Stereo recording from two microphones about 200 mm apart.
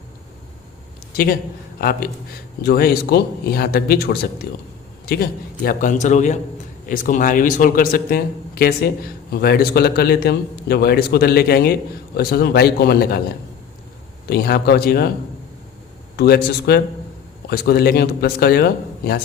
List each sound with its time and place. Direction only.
1.1 s a man's voice: 50° left (ahead or behind)
14.3 s a man's voice: 50° left (ahead or behind)
16.1 s a man's voice: 55° left (ahead or behind)